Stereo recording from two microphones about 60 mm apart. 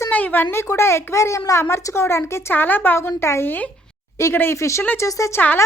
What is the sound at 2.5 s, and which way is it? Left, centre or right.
Speech, left.